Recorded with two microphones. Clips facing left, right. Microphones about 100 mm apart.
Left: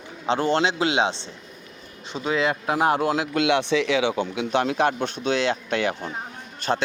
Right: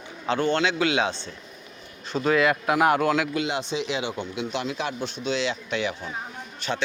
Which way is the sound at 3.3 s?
70° left (ahead or behind).